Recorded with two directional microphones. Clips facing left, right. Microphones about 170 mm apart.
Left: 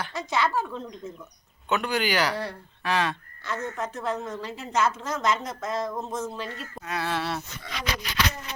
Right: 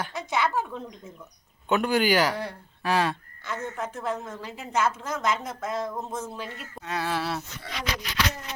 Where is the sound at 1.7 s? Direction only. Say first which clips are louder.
Right 3 dB; 45° right (ahead or behind).